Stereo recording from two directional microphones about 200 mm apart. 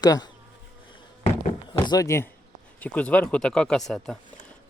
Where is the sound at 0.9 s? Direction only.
25° left (ahead or behind).